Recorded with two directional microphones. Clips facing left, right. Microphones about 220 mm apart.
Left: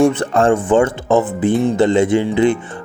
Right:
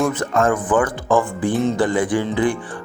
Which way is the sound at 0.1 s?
30° left (ahead or behind).